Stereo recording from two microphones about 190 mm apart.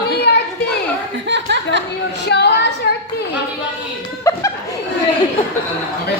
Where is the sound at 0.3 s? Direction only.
60° left (ahead or behind).